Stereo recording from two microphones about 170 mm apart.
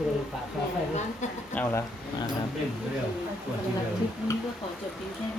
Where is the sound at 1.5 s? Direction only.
15° left (ahead or behind).